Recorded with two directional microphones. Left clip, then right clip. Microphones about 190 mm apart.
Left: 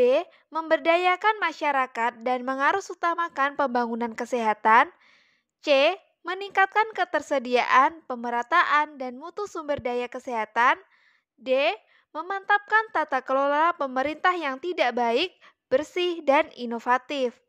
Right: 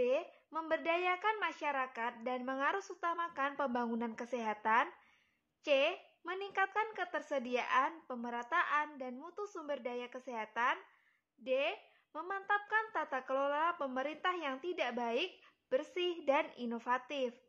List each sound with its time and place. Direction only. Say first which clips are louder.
0.0 s speech: left 13 dB; 45° left (ahead or behind)